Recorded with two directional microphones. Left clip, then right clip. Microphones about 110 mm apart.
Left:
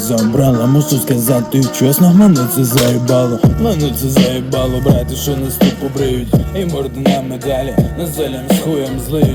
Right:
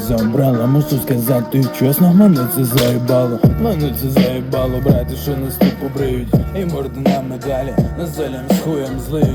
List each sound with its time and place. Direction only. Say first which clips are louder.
0.1 s speech: left 2 dB; 45° left (ahead or behind)